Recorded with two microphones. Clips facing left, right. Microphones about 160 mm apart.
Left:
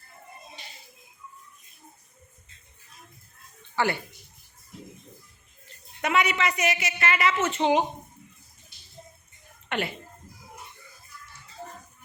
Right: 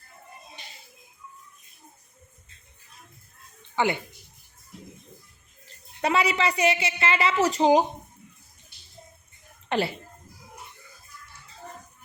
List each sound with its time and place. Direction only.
3.8 s speech: 20° right (ahead or behind)
6.0 s a woman's voice: 30° right (ahead or behind)
9.6 s speech: 30° right (ahead or behind)